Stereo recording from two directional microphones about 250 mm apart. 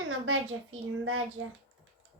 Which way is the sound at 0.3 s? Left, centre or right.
Right.